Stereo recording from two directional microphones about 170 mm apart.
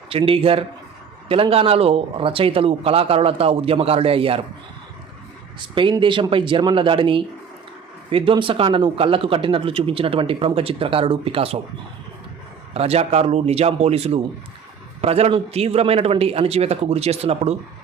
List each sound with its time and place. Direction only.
0.1 s speech: 35° right (ahead or behind)
5.5 s speech: 30° right (ahead or behind)
12.7 s speech: 35° right (ahead or behind)